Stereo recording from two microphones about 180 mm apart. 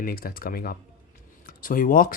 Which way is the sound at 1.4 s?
50° left (ahead or behind).